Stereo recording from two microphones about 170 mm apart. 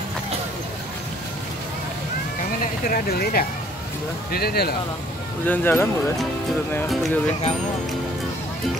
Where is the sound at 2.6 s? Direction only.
60° left (ahead or behind).